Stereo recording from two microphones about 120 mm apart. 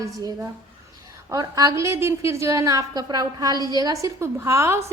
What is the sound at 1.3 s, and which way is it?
A woman's voice, 30° right (ahead or behind).